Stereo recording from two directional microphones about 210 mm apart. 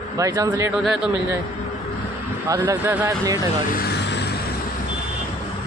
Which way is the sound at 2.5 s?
10° right (ahead or behind).